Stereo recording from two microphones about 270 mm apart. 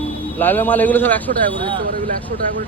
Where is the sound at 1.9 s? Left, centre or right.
Right.